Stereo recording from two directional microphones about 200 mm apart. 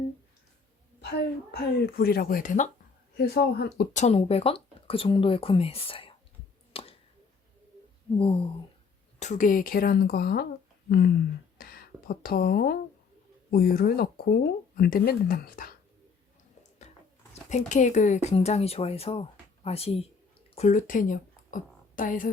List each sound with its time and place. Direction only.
1.5 s speech: 50° left (ahead or behind)
3.2 s speech: 50° left (ahead or behind)
3.9 s speech: 35° left (ahead or behind)
6.7 s finger snapping: 30° left (ahead or behind)
8.2 s speech: 25° left (ahead or behind)
9.1 s speech: 35° left (ahead or behind)
11.5 s a sound: 50° left (ahead or behind)
13.5 s speech: 50° left (ahead or behind)
16.8 s a sound: 35° left (ahead or behind)
17.5 s speech: 35° left (ahead or behind)
20.6 s speech: 40° left (ahead or behind)